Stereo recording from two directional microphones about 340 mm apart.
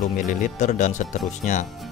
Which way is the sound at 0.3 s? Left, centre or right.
Left.